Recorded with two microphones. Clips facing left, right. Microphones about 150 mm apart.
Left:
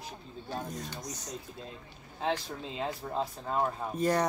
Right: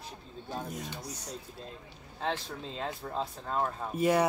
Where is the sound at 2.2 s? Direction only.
5° left (ahead or behind).